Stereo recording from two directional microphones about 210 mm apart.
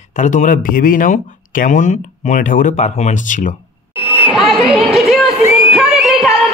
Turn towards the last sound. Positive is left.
turn(degrees=0)  # may be behind; listen again after turning